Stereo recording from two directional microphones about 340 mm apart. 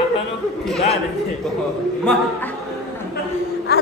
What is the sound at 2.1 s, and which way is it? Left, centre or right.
Speech, centre.